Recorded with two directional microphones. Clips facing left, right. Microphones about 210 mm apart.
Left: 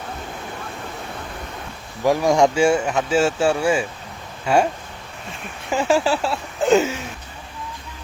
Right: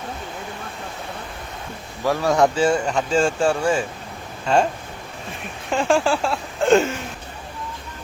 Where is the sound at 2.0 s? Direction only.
15° left (ahead or behind).